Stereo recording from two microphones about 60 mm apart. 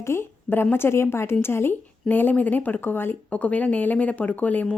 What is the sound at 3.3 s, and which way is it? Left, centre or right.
Speech, left.